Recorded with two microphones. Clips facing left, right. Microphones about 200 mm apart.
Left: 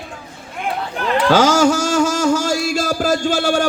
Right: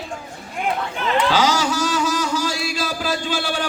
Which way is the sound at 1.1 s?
45° left (ahead or behind).